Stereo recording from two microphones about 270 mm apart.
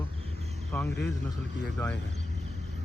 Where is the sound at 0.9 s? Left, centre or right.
Left.